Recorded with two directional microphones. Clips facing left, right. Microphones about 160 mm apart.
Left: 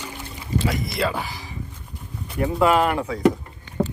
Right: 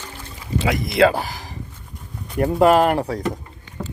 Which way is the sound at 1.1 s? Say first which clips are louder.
Right 3 dB; 40° right (ahead or behind).